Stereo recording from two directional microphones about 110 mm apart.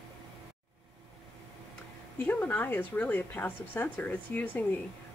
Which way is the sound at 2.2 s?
15° left (ahead or behind).